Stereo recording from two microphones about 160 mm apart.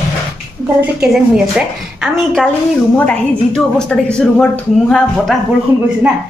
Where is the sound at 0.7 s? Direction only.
5° right (ahead or behind).